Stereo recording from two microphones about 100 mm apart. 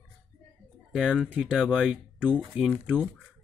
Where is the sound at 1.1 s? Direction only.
15° right (ahead or behind).